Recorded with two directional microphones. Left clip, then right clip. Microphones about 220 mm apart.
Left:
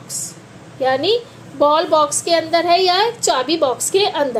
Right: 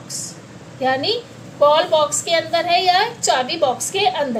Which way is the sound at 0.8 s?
30° left (ahead or behind).